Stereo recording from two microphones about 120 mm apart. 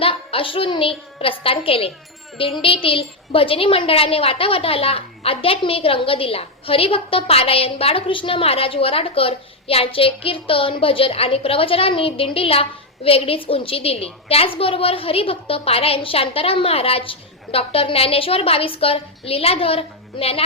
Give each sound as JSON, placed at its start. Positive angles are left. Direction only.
{"t": 0.0, "sound": "a child's voice", "side_deg": 50}